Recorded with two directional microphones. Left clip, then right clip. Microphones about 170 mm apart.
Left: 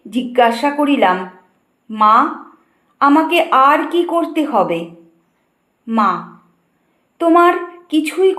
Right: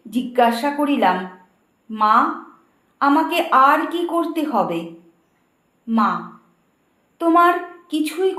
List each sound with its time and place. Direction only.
0.1 s a woman's voice: 15° left (ahead or behind)
7.2 s a woman's voice: 20° left (ahead or behind)